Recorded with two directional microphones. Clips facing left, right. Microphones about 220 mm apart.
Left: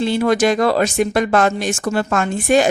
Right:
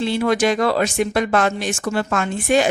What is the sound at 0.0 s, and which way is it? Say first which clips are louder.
Speech: left 3 dB; 45° left (ahead or behind).